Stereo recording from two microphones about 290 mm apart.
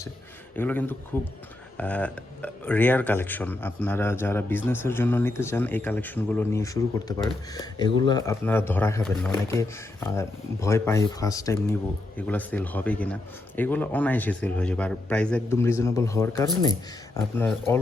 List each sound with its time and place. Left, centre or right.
0.5 s speech: centre